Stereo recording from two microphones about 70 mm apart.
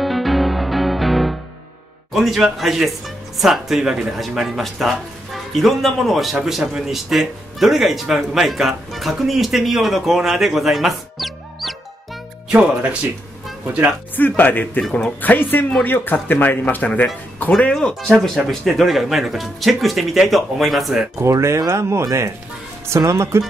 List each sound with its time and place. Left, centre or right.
0.0 s music: centre
2.1 s speech: centre
12.4 s speech: centre
14.1 s speech: left
14.8 s speech: centre
15.2 s speech: left
17.7 s speech: centre
21.2 s speech: right